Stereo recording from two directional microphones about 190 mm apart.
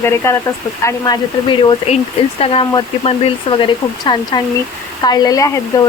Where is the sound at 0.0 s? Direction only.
15° left (ahead or behind).